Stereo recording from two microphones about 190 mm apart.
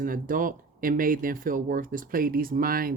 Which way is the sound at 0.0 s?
45° right (ahead or behind).